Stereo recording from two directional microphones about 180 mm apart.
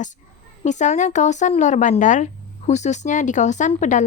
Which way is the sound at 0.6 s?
40° left (ahead or behind).